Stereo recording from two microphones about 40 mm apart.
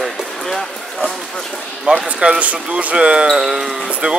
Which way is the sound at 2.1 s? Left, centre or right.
Right.